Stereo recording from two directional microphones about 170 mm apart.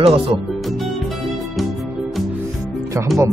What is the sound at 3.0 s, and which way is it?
Speech, 15° right (ahead or behind).